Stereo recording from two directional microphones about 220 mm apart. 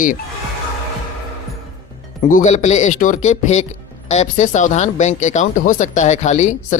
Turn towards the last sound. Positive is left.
turn(degrees=35)  # may be behind; listen again after turning